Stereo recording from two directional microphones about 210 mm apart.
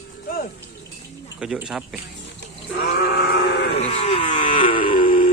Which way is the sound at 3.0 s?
50° left (ahead or behind).